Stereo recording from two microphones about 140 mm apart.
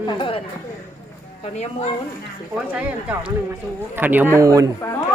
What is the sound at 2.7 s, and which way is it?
Speech, 10° right (ahead or behind).